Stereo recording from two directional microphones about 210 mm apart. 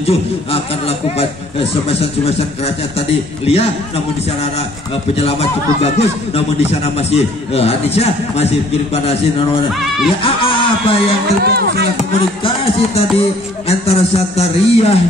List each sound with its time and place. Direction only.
0.0 s music: 30° left (ahead or behind)
5.1 s music: 30° left (ahead or behind)
10.2 s music: 25° left (ahead or behind)
11.4 s speech: 50° right (ahead or behind)
12.0 s music: 30° left (ahead or behind)